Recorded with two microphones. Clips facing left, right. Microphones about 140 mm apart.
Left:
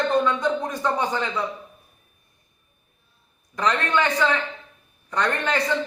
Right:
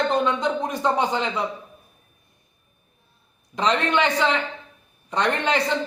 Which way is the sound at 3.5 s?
20° right (ahead or behind).